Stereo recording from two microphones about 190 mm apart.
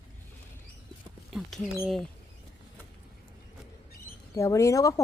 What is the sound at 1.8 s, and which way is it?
Rodents, centre (ahead or behind).